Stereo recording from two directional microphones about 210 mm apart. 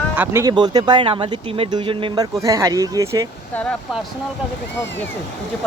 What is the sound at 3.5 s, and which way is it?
Speech, 5° left (ahead or behind).